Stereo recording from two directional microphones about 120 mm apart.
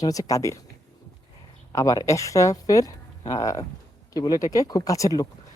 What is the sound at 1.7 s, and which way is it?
Speech, 30° left (ahead or behind).